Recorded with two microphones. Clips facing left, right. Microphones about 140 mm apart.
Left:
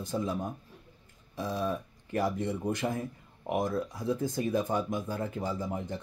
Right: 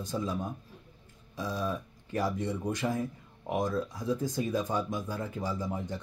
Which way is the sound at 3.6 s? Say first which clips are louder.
Right 1 dB; 25° left (ahead or behind).